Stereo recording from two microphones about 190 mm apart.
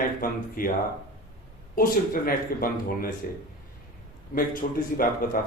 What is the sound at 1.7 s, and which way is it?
Speech, 50° left (ahead or behind).